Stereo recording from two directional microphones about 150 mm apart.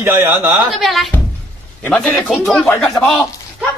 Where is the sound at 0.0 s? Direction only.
15° right (ahead or behind).